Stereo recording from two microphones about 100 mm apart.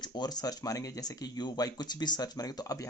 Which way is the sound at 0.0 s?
45° left (ahead or behind).